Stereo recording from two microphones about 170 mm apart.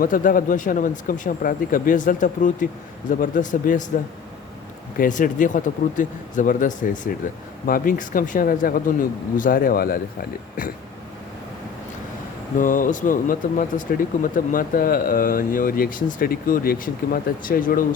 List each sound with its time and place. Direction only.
0.0 s speech: 55° left (ahead or behind)
4.9 s speech: 50° left (ahead or behind)
12.5 s speech: 50° left (ahead or behind)